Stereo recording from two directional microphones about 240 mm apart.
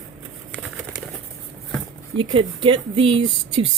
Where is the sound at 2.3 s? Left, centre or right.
Right.